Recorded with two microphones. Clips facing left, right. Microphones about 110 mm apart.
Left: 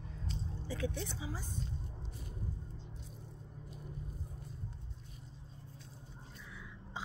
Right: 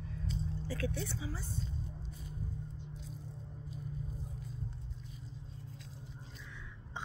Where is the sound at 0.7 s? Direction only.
20° left (ahead or behind).